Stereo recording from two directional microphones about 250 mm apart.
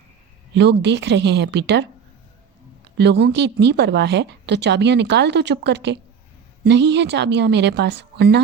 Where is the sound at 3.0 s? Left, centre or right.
Right.